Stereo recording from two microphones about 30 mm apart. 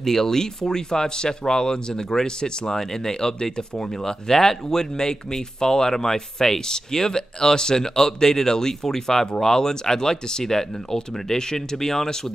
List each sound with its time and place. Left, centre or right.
0.0 s speech: centre